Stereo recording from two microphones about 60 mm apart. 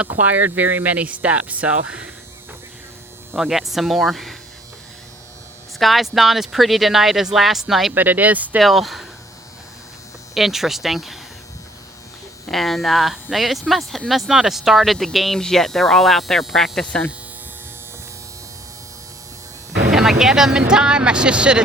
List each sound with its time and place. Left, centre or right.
0.1 s speech: right
3.3 s speech: centre
5.8 s speech: centre
7.9 s speech: right
8.6 s speech: centre
10.3 s speech: centre
12.5 s speech: centre
19.9 s speech: centre